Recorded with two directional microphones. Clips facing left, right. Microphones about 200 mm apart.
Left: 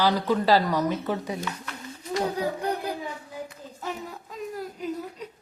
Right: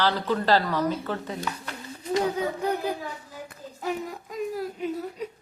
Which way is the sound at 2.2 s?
Centre (ahead or behind).